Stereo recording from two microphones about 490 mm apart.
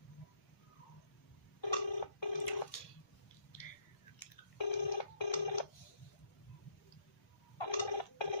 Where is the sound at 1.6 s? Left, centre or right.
Left.